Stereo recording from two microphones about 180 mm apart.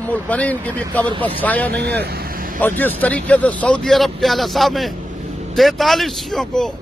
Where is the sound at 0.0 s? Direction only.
10° left (ahead or behind).